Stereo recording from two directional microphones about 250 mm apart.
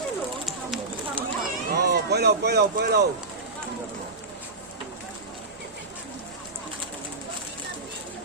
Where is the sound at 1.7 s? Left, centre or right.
Right.